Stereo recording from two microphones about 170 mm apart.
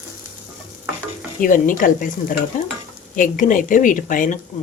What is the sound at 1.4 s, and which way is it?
Speech, 50° left (ahead or behind).